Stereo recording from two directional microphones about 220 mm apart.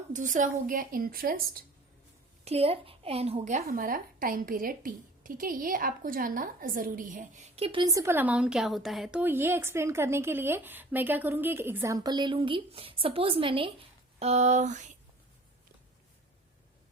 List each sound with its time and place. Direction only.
0.1 s a woman's voice: 35° right (ahead or behind)
2.4 s a woman's voice: 25° right (ahead or behind)